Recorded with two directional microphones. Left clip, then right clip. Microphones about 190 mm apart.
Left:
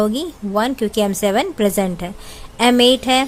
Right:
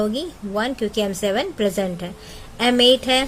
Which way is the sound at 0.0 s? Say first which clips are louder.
Left 4 dB; 20° left (ahead or behind).